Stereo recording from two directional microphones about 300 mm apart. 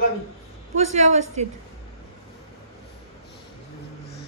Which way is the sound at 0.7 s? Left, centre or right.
Right.